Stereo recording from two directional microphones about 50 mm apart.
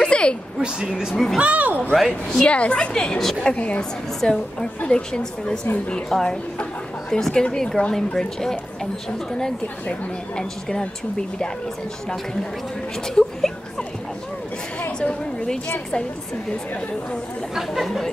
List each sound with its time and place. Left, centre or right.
0.0 s a sound: centre
0.6 s a woman's voice: centre
1.1 s a woman's voice: centre
1.4 s speech: right
2.0 s a woman's voice: centre
2.4 s a woman's voice: left
3.4 s a woman's voice: left
4.2 s a woman's voice: centre
6.0 s a woman's voice: centre
13.1 s a woman's voice: centre
17.6 s a woman's voice: centre